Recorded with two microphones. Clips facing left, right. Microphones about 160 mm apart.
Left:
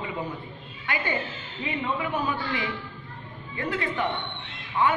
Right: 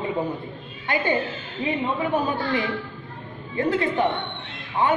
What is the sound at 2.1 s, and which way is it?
A man's voice, 35° right (ahead or behind).